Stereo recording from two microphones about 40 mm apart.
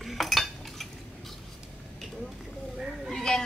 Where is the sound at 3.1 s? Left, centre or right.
Centre.